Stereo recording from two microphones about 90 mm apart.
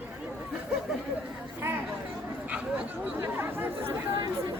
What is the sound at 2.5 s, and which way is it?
Chatter, 20° right (ahead or behind).